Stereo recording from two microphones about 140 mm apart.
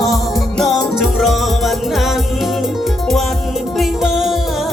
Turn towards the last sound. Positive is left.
turn(degrees=0)  # may be behind; listen again after turning